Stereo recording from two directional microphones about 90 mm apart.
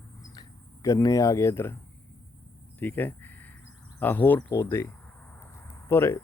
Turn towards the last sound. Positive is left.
turn(degrees=30)  # may be behind; listen again after turning